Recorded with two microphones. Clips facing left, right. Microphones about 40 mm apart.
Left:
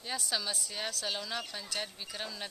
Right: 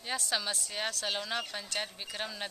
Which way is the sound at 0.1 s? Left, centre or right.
Centre.